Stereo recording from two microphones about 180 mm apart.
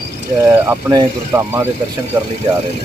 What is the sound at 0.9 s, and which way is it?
Speech, 15° right (ahead or behind).